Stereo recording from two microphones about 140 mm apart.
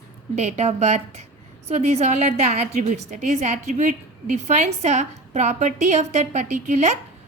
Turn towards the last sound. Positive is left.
turn(degrees=-55)  # may be behind; listen again after turning